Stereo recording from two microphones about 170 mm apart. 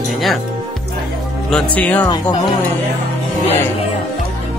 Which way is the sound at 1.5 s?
10° left (ahead or behind).